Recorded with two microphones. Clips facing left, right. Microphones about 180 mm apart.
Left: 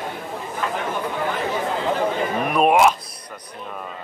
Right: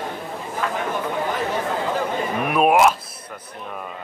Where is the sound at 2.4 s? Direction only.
5° right (ahead or behind).